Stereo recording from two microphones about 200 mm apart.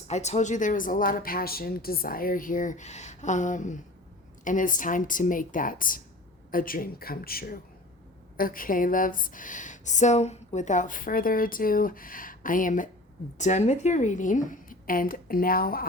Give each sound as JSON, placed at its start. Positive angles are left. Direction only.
{"t": 0.1, "sound": "a woman's voice", "side_deg": 35}